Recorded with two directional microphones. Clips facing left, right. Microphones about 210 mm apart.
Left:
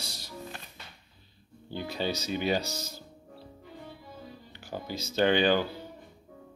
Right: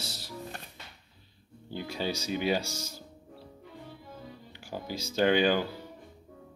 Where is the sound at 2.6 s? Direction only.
35° left (ahead or behind).